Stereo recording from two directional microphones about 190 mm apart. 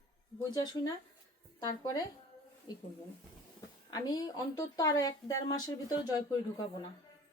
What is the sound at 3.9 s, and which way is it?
Speech, 20° left (ahead or behind).